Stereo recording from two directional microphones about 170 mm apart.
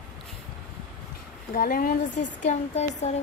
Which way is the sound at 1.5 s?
55° left (ahead or behind).